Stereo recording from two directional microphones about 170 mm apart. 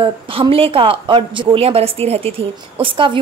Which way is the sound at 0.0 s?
30° right (ahead or behind).